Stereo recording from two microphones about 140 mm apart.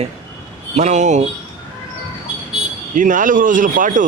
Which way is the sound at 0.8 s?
60° right (ahead or behind).